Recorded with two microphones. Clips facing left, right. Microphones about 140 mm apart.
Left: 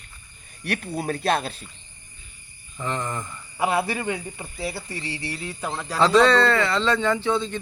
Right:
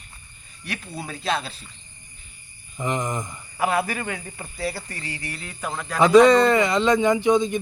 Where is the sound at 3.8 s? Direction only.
25° left (ahead or behind).